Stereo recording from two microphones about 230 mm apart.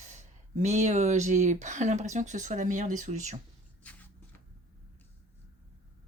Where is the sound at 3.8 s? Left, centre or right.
Centre.